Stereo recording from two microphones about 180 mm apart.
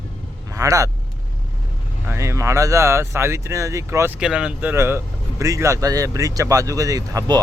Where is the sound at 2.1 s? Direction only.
15° right (ahead or behind).